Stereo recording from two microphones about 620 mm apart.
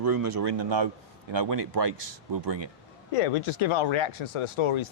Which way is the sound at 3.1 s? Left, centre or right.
Left.